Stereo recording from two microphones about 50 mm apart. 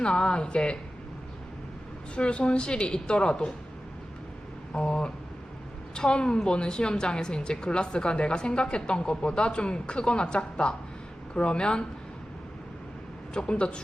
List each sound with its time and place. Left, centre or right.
0.0 s a woman's voice: left
2.1 s a woman's voice: left
4.7 s a woman's voice: centre
13.3 s a woman's voice: left